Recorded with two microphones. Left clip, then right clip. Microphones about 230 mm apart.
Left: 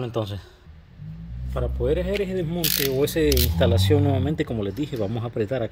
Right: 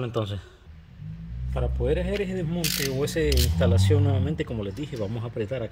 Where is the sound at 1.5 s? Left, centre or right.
Centre.